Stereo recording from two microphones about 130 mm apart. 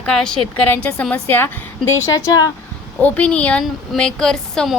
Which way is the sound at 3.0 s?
10° left (ahead or behind).